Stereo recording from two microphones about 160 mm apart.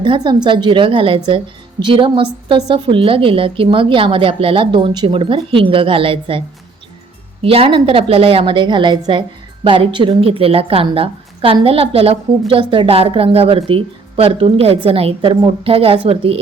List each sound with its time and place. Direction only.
0.0 s a woman's voice: 30° right (ahead or behind)
7.4 s a woman's voice: 35° right (ahead or behind)